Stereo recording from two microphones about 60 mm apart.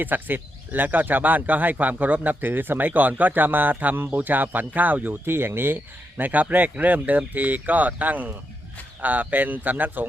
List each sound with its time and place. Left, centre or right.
0.0 s speech: right